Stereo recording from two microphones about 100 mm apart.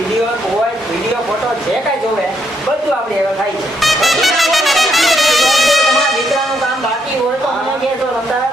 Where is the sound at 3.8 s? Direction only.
Centre (ahead or behind).